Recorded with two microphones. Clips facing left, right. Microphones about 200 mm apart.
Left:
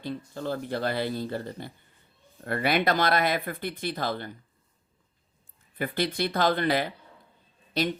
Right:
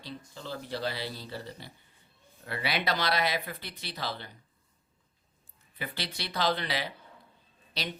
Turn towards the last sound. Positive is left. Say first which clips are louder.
# left 10 dB
turn(degrees=50)  # may be behind; listen again after turning